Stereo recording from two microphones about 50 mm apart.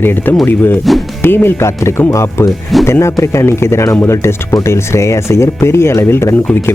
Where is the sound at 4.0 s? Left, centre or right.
Left.